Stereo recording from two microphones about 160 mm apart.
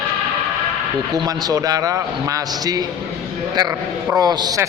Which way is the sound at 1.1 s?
25° right (ahead or behind).